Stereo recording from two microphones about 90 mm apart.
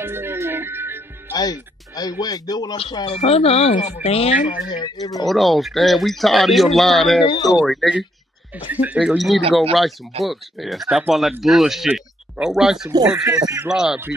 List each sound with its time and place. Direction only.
0.0 s music: 25° right (ahead or behind)
1.3 s speech: 45° left (ahead or behind)
3.1 s speech: 90° left
4.6 s speech: 55° left (ahead or behind)
5.2 s speech: centre (ahead or behind)
8.6 s speech: 15° right (ahead or behind)
9.0 s speech: centre (ahead or behind)
13.4 s speech: 40° right (ahead or behind)
13.7 s speech: 5° right (ahead or behind)